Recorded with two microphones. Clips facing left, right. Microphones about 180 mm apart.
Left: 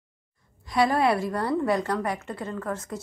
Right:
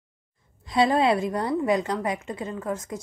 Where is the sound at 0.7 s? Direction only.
25° right (ahead or behind).